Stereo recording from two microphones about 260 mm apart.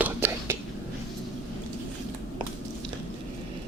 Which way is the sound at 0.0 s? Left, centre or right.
Centre.